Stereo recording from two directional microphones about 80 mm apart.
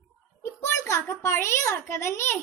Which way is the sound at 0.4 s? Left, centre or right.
Left.